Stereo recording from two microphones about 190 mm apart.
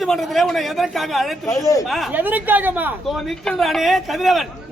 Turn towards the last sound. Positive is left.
turn(degrees=0)  # may be behind; listen again after turning